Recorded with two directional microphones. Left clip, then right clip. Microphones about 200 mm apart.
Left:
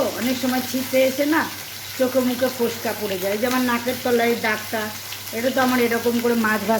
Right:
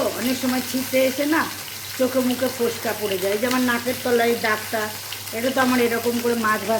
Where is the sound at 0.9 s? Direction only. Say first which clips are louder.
Left 1 dB; 5° left (ahead or behind).